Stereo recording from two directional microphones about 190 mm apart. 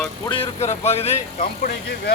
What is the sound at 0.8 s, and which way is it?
Speech, 35° left (ahead or behind).